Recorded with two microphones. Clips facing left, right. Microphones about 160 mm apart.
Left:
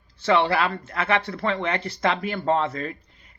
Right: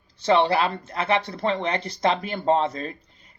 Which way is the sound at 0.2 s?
20° right (ahead or behind).